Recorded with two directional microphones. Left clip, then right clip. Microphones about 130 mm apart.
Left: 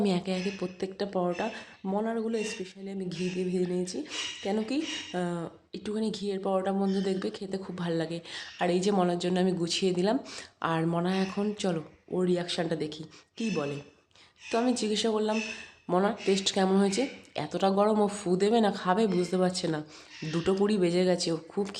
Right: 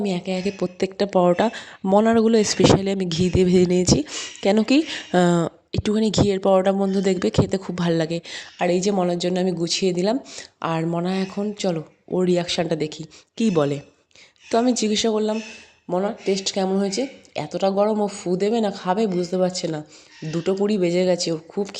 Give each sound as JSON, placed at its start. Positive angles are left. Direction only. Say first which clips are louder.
{"t": 0.0, "sound": "speech", "louder": "right 4 dB", "side_deg": -25}
{"t": 0.3, "sound": "speech", "louder": "right 9 dB", "side_deg": -55}
{"t": 5.7, "sound": "speech", "louder": "right 12 dB", "side_deg": -75}
{"t": 11.3, "sound": "speech", "louder": "right 6 dB", "side_deg": -30}
{"t": 12.1, "sound": "speech", "louder": "right 8 dB", "side_deg": -55}
{"t": 14.5, "sound": "speech", "louder": "right 8 dB", "side_deg": -50}
{"t": 15.9, "sound": "speech", "louder": "right 4 dB", "side_deg": -20}